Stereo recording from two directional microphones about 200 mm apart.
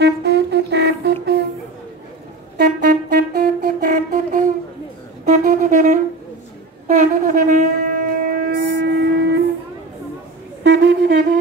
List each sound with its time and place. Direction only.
0.0 s music: 55° right (ahead or behind)
2.5 s music: 45° right (ahead or behind)
5.3 s wind instrument: 40° right (ahead or behind)
6.9 s shofar: 40° right (ahead or behind); by 9.4 s 55° right (ahead or behind)
10.6 s a sound: 55° right (ahead or behind)